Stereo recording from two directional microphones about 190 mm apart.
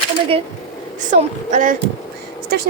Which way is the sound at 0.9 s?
40° right (ahead or behind).